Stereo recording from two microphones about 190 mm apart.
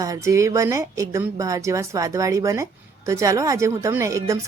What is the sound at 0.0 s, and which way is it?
A woman's voice, 15° right (ahead or behind).